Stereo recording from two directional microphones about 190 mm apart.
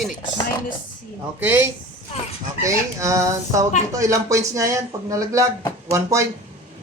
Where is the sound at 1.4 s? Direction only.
10° right (ahead or behind).